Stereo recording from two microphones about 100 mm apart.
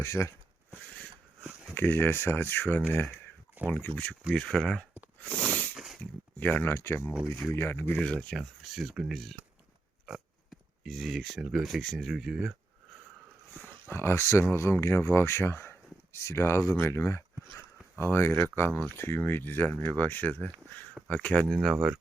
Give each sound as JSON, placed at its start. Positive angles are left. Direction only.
{"t": 0.0, "sound": "speech", "side_deg": 30}
{"t": 1.7, "sound": "speech", "side_deg": 20}
{"t": 4.4, "sound": "speech", "side_deg": 10}
{"t": 5.2, "sound": "a sound", "side_deg": 10}
{"t": 5.7, "sound": "a sound", "side_deg": -5}
{"t": 6.0, "sound": "speech", "side_deg": 20}
{"t": 10.8, "sound": "speech", "side_deg": -5}
{"t": 13.6, "sound": "speech", "side_deg": 20}
{"t": 21.5, "sound": "speech", "side_deg": 0}